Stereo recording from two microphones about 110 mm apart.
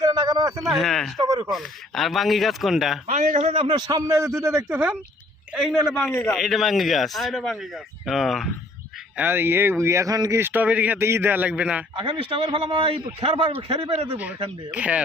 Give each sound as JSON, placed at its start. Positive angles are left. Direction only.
{"t": 0.0, "sound": "a sound", "side_deg": -35}
{"t": 0.7, "sound": "speech", "side_deg": 0}
{"t": 1.2, "sound": "speech", "side_deg": -35}
{"t": 1.5, "sound": "speech", "side_deg": 0}
{"t": 3.1, "sound": "speech", "side_deg": -90}
{"t": 3.6, "sound": "speech", "side_deg": -40}
{"t": 5.5, "sound": "speech", "side_deg": 0}
{"t": 9.1, "sound": "speech", "side_deg": -20}
{"t": 10.4, "sound": "a man's voice", "side_deg": -15}
{"t": 11.9, "sound": "a man's voice", "side_deg": -50}
{"t": 14.7, "sound": "a man's voice", "side_deg": -10}